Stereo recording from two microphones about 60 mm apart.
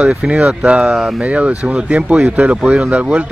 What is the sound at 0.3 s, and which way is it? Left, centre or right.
Speech, centre.